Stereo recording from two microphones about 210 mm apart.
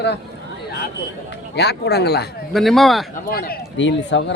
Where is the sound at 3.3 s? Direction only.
45° left (ahead or behind).